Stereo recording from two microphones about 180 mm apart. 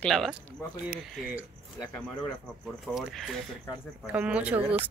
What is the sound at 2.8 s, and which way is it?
Speech, centre (ahead or behind).